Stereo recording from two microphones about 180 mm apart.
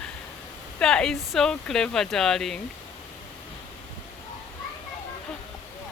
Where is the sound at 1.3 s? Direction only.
Centre (ahead or behind).